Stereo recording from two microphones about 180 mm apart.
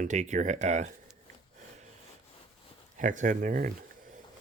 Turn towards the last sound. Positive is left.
turn(degrees=-50)  # may be behind; listen again after turning